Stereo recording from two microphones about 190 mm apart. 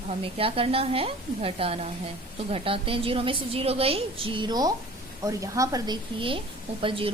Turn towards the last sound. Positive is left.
turn(degrees=-30)  # may be behind; listen again after turning